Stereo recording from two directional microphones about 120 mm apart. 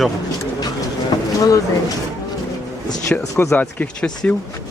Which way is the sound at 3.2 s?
20° left (ahead or behind).